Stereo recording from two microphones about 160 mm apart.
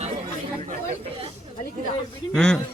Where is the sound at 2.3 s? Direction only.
5° left (ahead or behind).